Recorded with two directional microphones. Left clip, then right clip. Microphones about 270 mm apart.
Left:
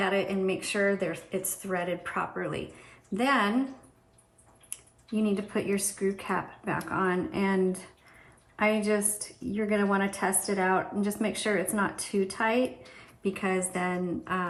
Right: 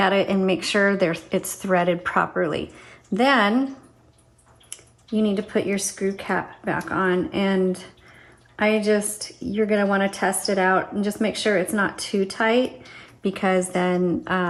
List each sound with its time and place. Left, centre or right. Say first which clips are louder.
0.0 s a woman's voice: right 8 dB; centre
5.1 s a woman's voice: right 7 dB; centre
9.5 s a woman's voice: right 7 dB; centre